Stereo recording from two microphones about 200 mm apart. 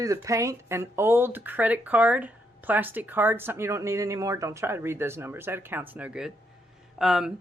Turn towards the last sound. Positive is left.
turn(degrees=0)  # may be behind; listen again after turning